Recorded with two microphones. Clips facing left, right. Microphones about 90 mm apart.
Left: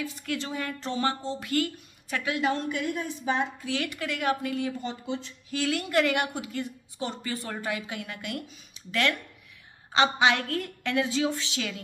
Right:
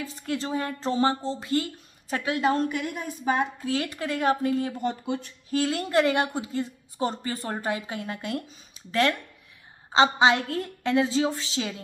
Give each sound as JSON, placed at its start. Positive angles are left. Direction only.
{"t": 0.0, "sound": "a woman's voice", "side_deg": -35}
{"t": 4.7, "sound": "speech", "side_deg": -50}
{"t": 5.5, "sound": "a woman's voice", "side_deg": -35}
{"t": 10.1, "sound": "a woman's voice", "side_deg": -30}